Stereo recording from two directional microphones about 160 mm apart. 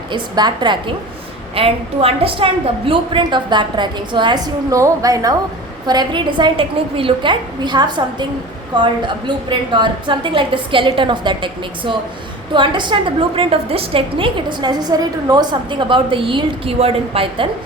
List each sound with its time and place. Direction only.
0.1 s a woman's voice: 25° right (ahead or behind)